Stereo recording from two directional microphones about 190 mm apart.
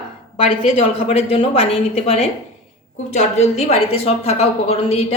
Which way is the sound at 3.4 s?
35° left (ahead or behind).